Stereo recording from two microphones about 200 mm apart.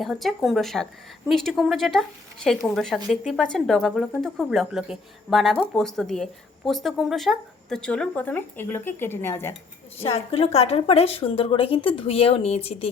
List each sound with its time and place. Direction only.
0.0 s speech: centre (ahead or behind)
10.0 s a woman's voice: 30° left (ahead or behind)